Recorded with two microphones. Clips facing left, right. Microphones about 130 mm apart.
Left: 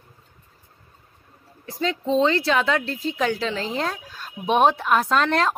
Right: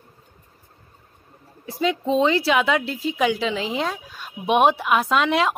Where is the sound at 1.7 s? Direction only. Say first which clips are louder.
Right 2 dB; 10° right (ahead or behind).